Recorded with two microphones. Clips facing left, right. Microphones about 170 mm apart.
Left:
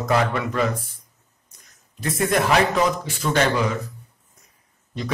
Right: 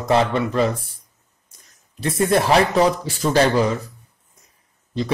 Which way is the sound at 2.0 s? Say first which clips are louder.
Right 3 dB; 30° right (ahead or behind).